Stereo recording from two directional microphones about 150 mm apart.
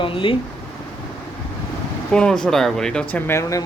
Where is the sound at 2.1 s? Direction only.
5° left (ahead or behind).